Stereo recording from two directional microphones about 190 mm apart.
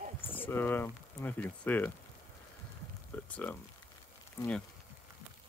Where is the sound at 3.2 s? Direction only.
5° left (ahead or behind).